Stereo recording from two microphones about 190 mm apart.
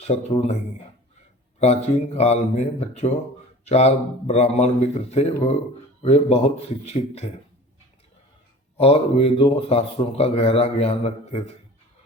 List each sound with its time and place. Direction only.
0.3 s a man's voice: 35° left (ahead or behind)
8.8 s a man's voice: 30° left (ahead or behind)